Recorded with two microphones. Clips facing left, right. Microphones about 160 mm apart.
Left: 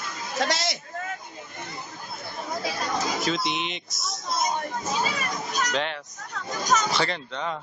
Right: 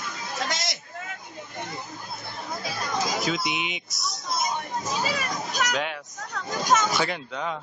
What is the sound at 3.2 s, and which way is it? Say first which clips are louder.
Speech: left 1 dB; 5° right (ahead or behind).